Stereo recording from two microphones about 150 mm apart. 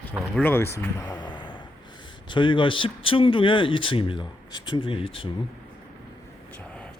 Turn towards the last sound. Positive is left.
turn(degrees=10)  # may be behind; listen again after turning